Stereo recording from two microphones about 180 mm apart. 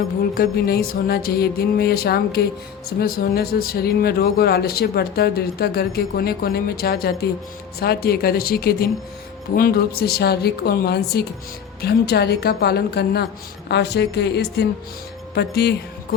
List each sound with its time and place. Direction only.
0.3 s a woman's voice: 60° left (ahead or behind)